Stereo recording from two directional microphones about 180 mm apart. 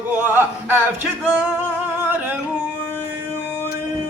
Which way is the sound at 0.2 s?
10° right (ahead or behind).